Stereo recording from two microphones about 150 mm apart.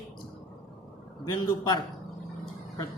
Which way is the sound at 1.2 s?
25° left (ahead or behind).